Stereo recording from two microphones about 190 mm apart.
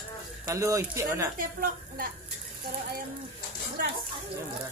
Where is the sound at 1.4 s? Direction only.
50° right (ahead or behind).